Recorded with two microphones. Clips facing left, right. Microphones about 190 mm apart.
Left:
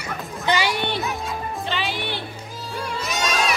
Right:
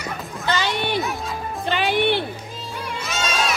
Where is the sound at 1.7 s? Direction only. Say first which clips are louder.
Right 10 dB; 55° right (ahead or behind).